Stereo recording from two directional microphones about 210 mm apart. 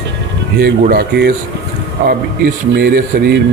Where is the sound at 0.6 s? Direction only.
45° right (ahead or behind).